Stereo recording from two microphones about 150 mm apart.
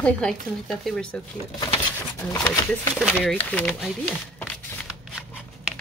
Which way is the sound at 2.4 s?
20° left (ahead or behind).